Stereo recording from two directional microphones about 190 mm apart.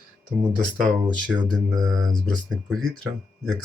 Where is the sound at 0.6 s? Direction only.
5° left (ahead or behind).